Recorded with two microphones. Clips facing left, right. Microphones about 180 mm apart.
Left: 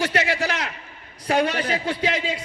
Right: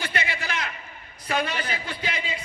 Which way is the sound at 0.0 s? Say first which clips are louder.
Left 8 dB; 80° left.